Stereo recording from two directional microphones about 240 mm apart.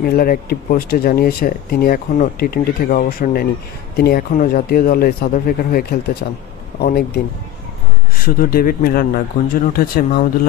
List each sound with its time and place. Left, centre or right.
0.0 s speech: left
8.2 s speech: left